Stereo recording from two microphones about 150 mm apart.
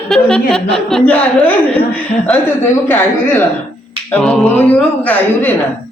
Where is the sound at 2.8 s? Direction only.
15° left (ahead or behind).